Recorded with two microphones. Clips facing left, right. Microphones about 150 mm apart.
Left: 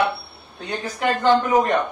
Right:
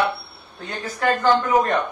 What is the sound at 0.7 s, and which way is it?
Speech, 20° left (ahead or behind).